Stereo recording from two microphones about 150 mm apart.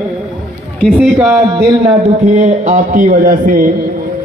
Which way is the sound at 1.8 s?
50° right (ahead or behind).